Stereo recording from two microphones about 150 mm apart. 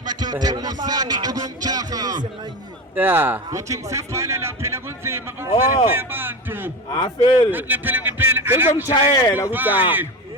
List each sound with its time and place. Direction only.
0.1 s speech: 25° right (ahead or behind)
0.9 s a sound: 25° right (ahead or behind)
2.9 s a man's voice: 15° right (ahead or behind)
6.9 s speech: 25° left (ahead or behind)
7.5 s speech: 10° right (ahead or behind)
8.9 s speech: 30° left (ahead or behind)
9.5 s speech: 10° right (ahead or behind)